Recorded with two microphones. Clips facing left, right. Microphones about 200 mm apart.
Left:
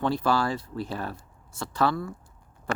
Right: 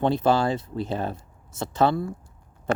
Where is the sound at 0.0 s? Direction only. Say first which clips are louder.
Right 4 dB; 25° right (ahead or behind).